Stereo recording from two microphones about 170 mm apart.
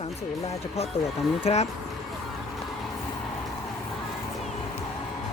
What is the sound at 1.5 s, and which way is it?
Speech, 40° left (ahead or behind).